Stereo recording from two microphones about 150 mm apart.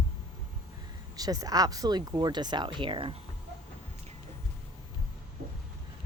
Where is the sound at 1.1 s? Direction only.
25° right (ahead or behind).